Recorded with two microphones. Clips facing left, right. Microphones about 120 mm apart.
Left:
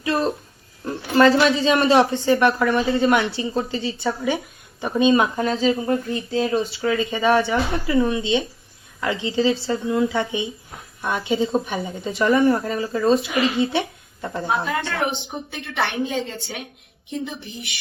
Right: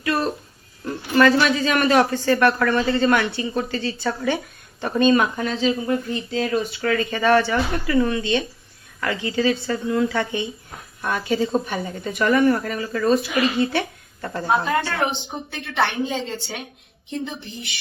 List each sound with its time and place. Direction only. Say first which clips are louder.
0.0 s a sound: left 1 dB; 30° left (ahead or behind)
0.9 s a man's voice: left 1 dB; 30° left (ahead or behind)
5.4 s speech: left 2 dB; 35° left (ahead or behind)
6.8 s a man's voice: even; 15° left (ahead or behind)
14.4 s a woman's voice: right 3 dB; centre (ahead or behind)